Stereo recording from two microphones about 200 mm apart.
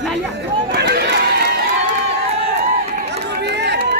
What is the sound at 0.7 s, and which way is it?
Run, 55° right (ahead or behind).